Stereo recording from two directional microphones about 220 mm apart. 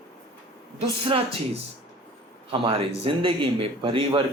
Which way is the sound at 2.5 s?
25° right (ahead or behind).